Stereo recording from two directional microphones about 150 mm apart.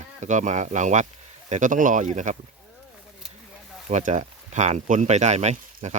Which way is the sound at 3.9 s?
55° right (ahead or behind).